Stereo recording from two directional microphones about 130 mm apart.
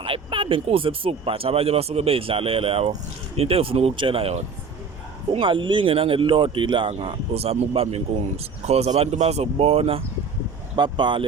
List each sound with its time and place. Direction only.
0.0 s speech: 40° right (ahead or behind)
10.8 s speech: 35° right (ahead or behind)